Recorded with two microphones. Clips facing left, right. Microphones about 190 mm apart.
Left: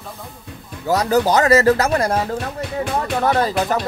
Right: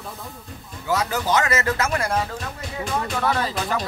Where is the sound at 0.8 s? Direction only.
40° left (ahead or behind).